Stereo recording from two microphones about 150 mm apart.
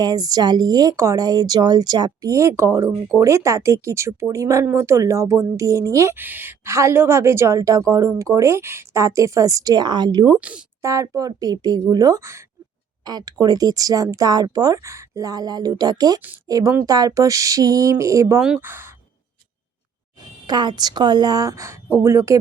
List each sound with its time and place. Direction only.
0.0 s a woman's voice: 25° right (ahead or behind)
18.4 s speech: 10° right (ahead or behind)
20.5 s a woman's voice: 30° right (ahead or behind)